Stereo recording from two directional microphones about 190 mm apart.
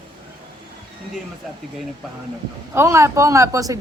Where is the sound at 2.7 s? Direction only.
15° right (ahead or behind).